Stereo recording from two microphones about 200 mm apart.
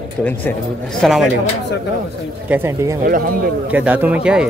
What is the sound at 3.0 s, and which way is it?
Speech, 45° right (ahead or behind).